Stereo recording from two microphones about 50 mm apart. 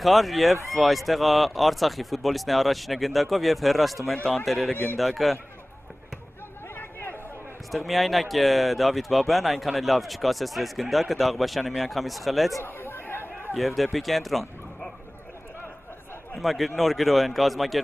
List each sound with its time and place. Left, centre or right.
0.0 s speech: centre
6.7 s chatter: left
7.7 s speech: centre
12.6 s chatter: left
13.6 s speech: centre
16.3 s speech: centre